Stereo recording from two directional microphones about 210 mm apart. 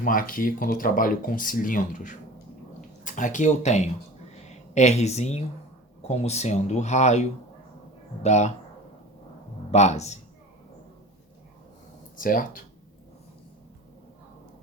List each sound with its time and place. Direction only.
0.0 s speech: 40° left (ahead or behind)
9.7 s speech: 30° left (ahead or behind)
12.1 s speech: 40° left (ahead or behind)